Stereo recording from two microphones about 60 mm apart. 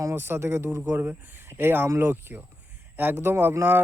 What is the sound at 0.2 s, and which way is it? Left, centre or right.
Speech, right.